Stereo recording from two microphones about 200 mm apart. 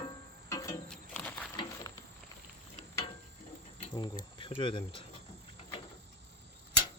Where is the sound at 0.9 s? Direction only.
5° left (ahead or behind).